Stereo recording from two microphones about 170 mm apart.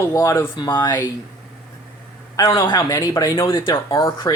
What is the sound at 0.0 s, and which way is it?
Speech, 20° left (ahead or behind).